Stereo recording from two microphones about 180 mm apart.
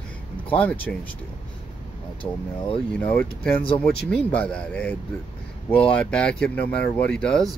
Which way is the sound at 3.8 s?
5° left (ahead or behind).